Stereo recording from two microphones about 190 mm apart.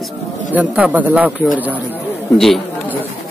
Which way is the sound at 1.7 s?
10° left (ahead or behind).